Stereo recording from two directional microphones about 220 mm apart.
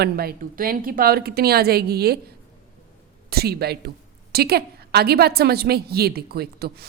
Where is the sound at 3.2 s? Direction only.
45° right (ahead or behind).